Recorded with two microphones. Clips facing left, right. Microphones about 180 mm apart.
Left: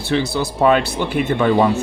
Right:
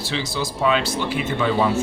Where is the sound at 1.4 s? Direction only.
50° left (ahead or behind).